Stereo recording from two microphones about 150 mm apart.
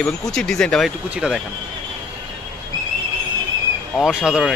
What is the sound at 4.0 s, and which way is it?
Speech, 5° right (ahead or behind).